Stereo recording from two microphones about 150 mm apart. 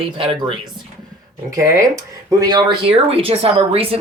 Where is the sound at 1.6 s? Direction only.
20° right (ahead or behind).